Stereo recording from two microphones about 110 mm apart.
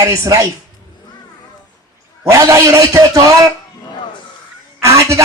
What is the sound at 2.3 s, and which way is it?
A man's voice, 30° right (ahead or behind).